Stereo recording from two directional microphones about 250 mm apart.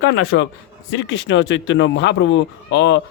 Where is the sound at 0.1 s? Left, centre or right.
Left.